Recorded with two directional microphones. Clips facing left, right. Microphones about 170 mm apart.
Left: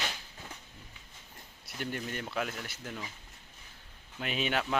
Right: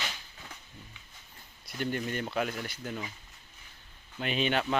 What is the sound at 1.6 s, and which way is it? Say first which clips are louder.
Speech: right 4 dB; centre (ahead or behind).